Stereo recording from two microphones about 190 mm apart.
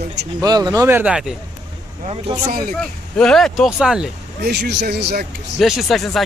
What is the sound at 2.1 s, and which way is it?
Speech, 30° right (ahead or behind).